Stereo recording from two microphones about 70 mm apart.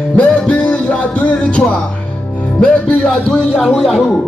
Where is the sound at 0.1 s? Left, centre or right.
Centre.